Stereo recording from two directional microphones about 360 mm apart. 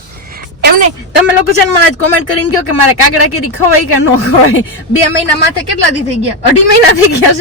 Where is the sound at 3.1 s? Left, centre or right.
Left.